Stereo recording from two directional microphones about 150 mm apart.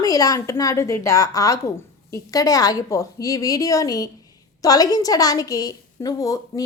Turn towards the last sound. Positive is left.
turn(degrees=25)  # may be behind; listen again after turning